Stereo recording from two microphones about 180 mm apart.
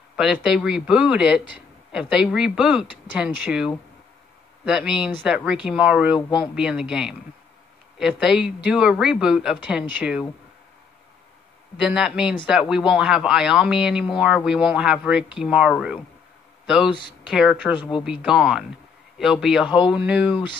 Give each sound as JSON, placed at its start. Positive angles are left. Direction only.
{"t": 0.1, "sound": "speech", "side_deg": 0}
{"t": 11.7, "sound": "speech", "side_deg": -5}
{"t": 16.9, "sound": "speech", "side_deg": 25}
{"t": 17.3, "sound": "speech", "side_deg": 0}